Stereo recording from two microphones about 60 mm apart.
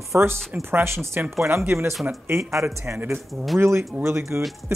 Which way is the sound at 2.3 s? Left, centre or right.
Right.